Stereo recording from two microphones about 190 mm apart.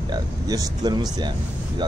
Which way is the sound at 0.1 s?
20° right (ahead or behind).